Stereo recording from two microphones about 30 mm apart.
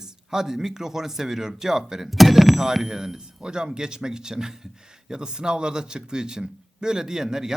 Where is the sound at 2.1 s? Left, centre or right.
Centre.